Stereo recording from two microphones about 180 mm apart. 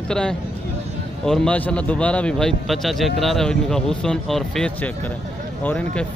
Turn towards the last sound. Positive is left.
turn(degrees=5)  # may be behind; listen again after turning